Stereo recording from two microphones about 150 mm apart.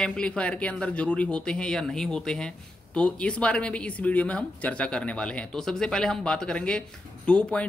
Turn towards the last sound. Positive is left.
turn(degrees=5)  # may be behind; listen again after turning